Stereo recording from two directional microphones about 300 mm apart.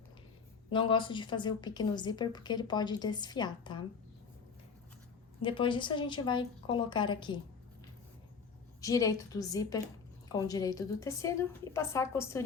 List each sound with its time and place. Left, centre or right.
0.7 s a woman's voice: centre
5.4 s a woman's voice: centre
8.8 s a woman's voice: centre